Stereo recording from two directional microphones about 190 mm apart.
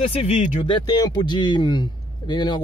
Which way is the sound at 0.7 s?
20° left (ahead or behind).